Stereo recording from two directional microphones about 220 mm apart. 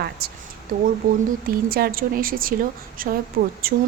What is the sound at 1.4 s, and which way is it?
A woman's voice, 45° right (ahead or behind).